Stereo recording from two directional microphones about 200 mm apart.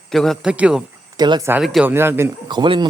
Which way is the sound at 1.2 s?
20° right (ahead or behind).